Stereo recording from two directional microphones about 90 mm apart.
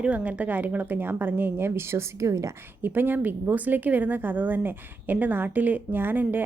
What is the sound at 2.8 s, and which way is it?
A woman's voice, 20° right (ahead or behind).